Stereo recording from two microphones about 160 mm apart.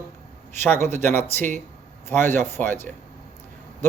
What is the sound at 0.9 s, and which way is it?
Speech, 15° left (ahead or behind).